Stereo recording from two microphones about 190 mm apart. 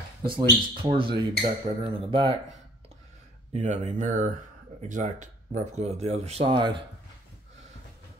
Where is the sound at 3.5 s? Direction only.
40° right (ahead or behind).